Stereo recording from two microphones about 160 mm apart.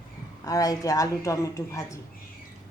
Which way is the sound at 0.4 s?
20° left (ahead or behind).